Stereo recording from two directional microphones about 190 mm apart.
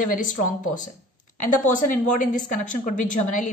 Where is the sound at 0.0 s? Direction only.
45° left (ahead or behind).